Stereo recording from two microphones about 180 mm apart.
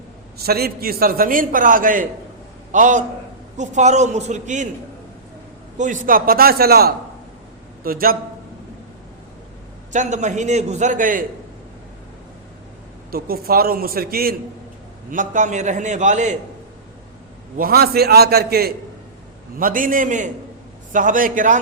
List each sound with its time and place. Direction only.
0.4 s a man's voice: 60° right (ahead or behind); by 4.7 s 40° right (ahead or behind)
5.7 s a man's voice: 45° right (ahead or behind)
9.9 s a man's voice: 40° right (ahead or behind)
13.1 s a man's voice: 55° right (ahead or behind)
15.1 s a man's voice: 45° right (ahead or behind)
17.6 s a man's voice: 55° right (ahead or behind)